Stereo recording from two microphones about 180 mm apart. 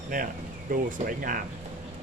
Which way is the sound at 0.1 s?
45° right (ahead or behind).